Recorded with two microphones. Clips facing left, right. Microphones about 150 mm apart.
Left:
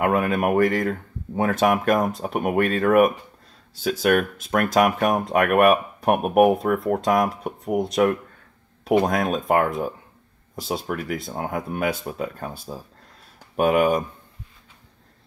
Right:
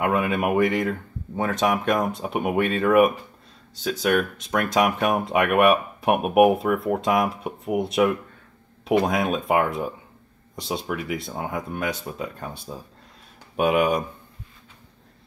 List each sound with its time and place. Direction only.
0.0 s speech: centre (ahead or behind)